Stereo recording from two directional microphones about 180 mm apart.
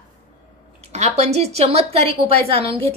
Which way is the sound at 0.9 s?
40° right (ahead or behind).